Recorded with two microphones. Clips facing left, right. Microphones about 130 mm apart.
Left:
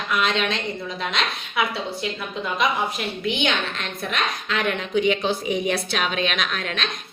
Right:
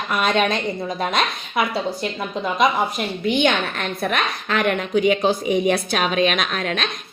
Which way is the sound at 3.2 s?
50° right (ahead or behind).